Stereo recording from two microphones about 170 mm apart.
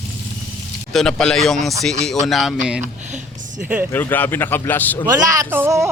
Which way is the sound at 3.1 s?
50° right (ahead or behind).